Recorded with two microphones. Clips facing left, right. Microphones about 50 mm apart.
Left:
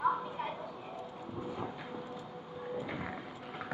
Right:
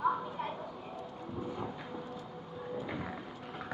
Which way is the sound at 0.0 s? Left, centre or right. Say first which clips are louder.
Even; centre.